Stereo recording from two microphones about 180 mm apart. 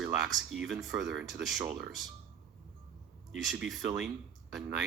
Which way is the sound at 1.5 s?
15° right (ahead or behind).